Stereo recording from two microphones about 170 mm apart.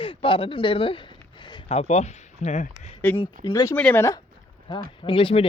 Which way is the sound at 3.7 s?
10° left (ahead or behind).